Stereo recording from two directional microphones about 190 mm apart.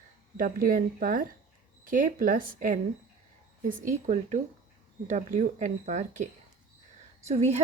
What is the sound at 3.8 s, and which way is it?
Speech, 40° right (ahead or behind).